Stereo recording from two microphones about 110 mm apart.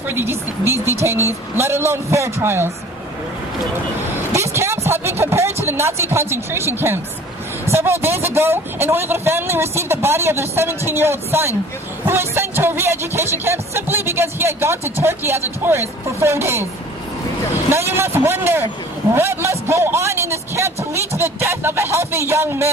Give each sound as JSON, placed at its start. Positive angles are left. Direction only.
{"t": 0.1, "sound": "music", "side_deg": -20}
{"t": 4.3, "sound": "vehicle", "side_deg": -25}
{"t": 4.9, "sound": "music", "side_deg": -25}
{"t": 17.7, "sound": "music", "side_deg": -25}